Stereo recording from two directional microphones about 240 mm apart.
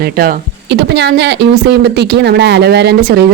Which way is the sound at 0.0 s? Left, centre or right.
Right.